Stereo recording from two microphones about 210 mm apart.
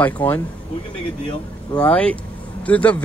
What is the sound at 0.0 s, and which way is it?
Speech, 5° left (ahead or behind).